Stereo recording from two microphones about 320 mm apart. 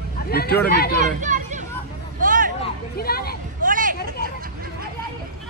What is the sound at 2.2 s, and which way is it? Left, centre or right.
Hubbub, right.